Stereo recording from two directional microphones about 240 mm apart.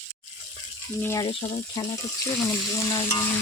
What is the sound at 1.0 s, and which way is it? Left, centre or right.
Stir, centre.